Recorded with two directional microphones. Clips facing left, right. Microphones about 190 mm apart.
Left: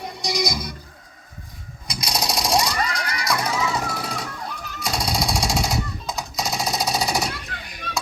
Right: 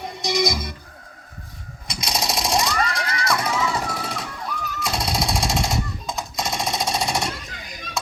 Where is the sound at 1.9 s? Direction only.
Centre (ahead or behind).